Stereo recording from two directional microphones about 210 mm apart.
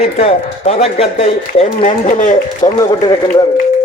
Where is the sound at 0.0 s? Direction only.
30° left (ahead or behind).